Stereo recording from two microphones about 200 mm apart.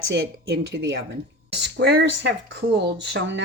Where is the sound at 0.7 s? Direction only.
65° right (ahead or behind).